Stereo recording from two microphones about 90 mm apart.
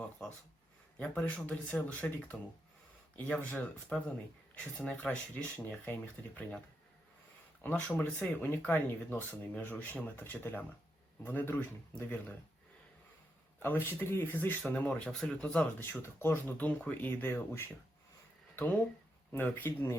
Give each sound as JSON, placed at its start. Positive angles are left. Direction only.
{"t": 0.2, "sound": "speech", "side_deg": 5}
{"t": 7.6, "sound": "speech", "side_deg": 20}
{"t": 13.6, "sound": "speech", "side_deg": 25}
{"t": 15.9, "sound": "speech", "side_deg": 30}
{"t": 19.3, "sound": "speech", "side_deg": 20}